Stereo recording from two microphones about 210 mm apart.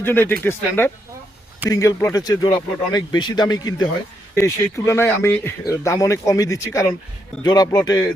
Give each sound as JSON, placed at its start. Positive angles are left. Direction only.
{"t": 0.0, "sound": "speech", "side_deg": 10}
{"t": 1.7, "sound": "speech", "side_deg": 15}